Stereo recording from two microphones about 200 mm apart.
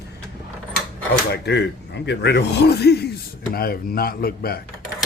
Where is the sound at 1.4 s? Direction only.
55° left (ahead or behind).